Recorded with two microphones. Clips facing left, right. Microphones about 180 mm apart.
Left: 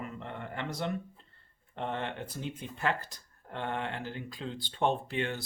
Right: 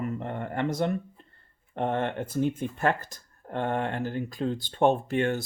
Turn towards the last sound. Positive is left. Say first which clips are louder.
# right 8 dB
turn(degrees=-45)  # may be behind; listen again after turning